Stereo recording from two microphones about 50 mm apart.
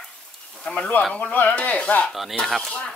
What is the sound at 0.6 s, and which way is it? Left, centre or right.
Speech, centre.